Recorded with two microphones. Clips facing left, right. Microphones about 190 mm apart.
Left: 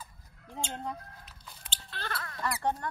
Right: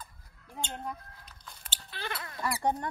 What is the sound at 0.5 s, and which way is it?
Chicken, 10° left (ahead or behind).